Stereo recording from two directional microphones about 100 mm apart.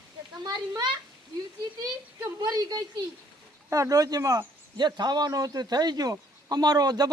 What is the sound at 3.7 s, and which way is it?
A man's voice, 35° right (ahead or behind).